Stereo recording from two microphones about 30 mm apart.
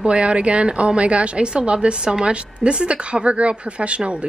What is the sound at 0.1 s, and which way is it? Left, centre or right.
A woman's voice, right.